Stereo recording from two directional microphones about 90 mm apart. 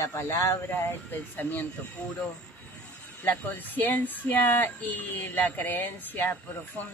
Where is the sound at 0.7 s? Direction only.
20° left (ahead or behind).